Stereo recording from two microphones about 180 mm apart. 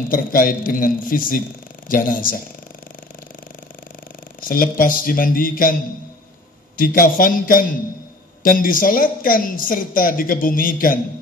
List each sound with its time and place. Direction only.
0.1 s speech: 50° left (ahead or behind)
4.4 s speech: 50° left (ahead or behind)
6.8 s speech: 50° left (ahead or behind)